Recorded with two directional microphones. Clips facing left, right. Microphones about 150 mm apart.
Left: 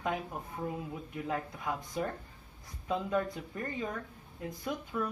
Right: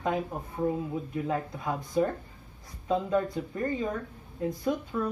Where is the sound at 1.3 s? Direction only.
30° right (ahead or behind).